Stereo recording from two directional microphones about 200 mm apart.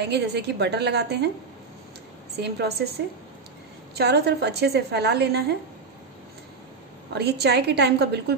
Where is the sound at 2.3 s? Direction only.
55° right (ahead or behind).